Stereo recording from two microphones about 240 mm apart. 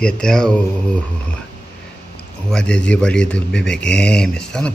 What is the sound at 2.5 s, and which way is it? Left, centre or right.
A man's voice, centre.